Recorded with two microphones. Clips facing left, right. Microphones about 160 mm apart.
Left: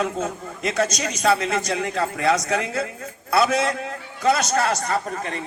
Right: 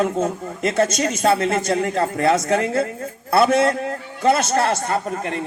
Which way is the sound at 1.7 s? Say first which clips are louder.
Right 5 dB; 40° right (ahead or behind).